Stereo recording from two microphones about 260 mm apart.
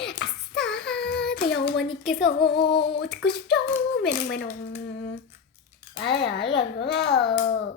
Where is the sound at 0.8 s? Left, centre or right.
Centre.